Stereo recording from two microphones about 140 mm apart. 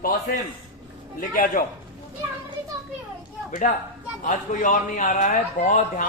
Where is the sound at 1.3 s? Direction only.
75° left (ahead or behind).